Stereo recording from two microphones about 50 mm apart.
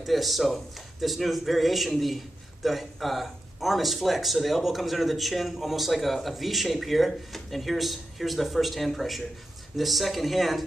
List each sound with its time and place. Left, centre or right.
0.0 s a man's voice: centre